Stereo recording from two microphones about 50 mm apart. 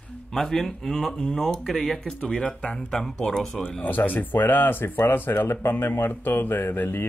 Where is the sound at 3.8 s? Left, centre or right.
Left.